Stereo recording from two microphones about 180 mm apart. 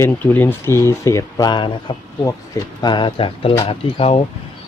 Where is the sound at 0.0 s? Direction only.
10° left (ahead or behind).